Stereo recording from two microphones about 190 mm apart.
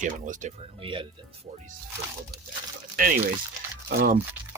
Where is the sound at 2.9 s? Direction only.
45° right (ahead or behind).